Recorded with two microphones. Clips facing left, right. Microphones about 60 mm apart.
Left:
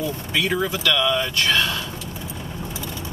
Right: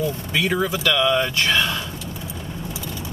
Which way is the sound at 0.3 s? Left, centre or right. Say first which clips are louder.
Even; centre.